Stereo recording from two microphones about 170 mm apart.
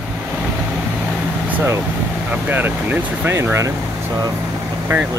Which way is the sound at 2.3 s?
10° right (ahead or behind).